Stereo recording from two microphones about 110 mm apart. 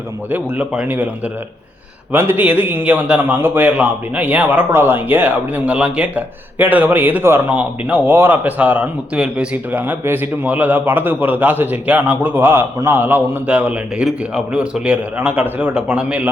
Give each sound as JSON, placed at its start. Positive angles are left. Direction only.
{"t": 0.3, "sound": "a man's voice", "side_deg": -15}